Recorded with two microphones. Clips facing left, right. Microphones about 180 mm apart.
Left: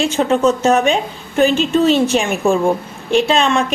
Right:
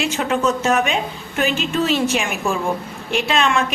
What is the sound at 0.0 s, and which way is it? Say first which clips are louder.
A woman's voice: left 5 dB; 30° left (ahead or behind).